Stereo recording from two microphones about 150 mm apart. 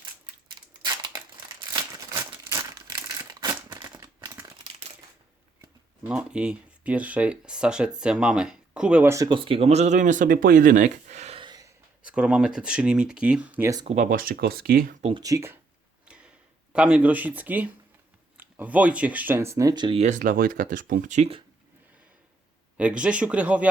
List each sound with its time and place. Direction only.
3.4 s crumpling: 30° right (ahead or behind)
6.0 s speech: 5° right (ahead or behind)
9.1 s speech: 30° right (ahead or behind); by 11.3 s 50° right (ahead or behind)
11.3 s gasp: 30° right (ahead or behind)
12.0 s speech: 5° right (ahead or behind)
13.8 s speech: 50° right (ahead or behind)
14.1 s speech: 75° right (ahead or behind)
15.2 s speech: 20° right (ahead or behind)
16.0 s a sound: 5° right (ahead or behind)
16.7 s speech: 10° right (ahead or behind); by 20.0 s 30° right (ahead or behind)
20.0 s speech: 55° right (ahead or behind)
22.8 s speech: 10° right (ahead or behind)